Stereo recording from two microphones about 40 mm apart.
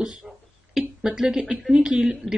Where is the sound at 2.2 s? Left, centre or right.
Centre.